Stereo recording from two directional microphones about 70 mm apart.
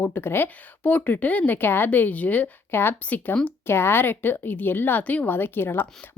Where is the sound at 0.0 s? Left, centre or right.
Left.